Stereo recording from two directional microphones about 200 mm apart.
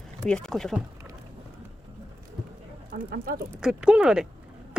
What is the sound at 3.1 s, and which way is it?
Speech, 45° right (ahead or behind).